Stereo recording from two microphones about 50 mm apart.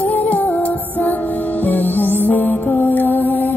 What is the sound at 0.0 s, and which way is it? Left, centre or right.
Music, left.